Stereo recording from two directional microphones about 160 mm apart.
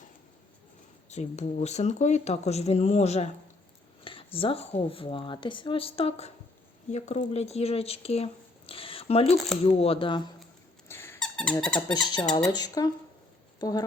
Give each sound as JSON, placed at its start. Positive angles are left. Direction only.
{"t": 1.1, "sound": "speech", "side_deg": 45}
{"t": 10.8, "sound": "squeak", "side_deg": 15}
{"t": 11.2, "sound": "squeak", "side_deg": 5}
{"t": 11.9, "sound": "speech", "side_deg": 25}